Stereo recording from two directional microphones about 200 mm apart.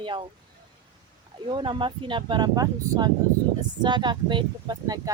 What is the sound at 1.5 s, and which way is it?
Speech, 25° right (ahead or behind).